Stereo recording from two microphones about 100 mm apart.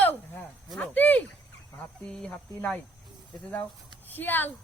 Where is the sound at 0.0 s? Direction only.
20° left (ahead or behind).